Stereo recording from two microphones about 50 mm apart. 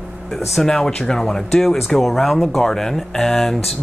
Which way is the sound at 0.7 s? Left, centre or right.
Centre.